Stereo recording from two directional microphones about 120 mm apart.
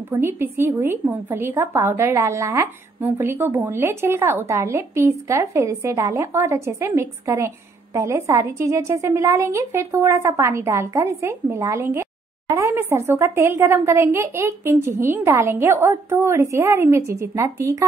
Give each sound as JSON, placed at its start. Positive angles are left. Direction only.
{"t": 0.1, "sound": "a woman's voice", "side_deg": -20}